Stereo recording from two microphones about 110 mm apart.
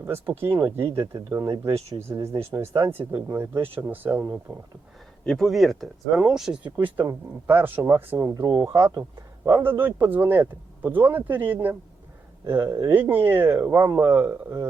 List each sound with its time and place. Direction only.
0.0 s speech: 20° right (ahead or behind)
5.2 s speech: 5° left (ahead or behind)
6.9 s speech: 20° right (ahead or behind)
12.9 s speech: 20° right (ahead or behind)